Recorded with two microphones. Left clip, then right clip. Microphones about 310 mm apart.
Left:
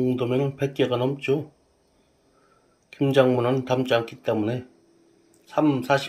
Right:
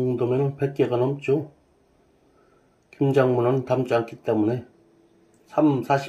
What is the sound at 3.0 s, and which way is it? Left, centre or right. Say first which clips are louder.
Speech: even; left.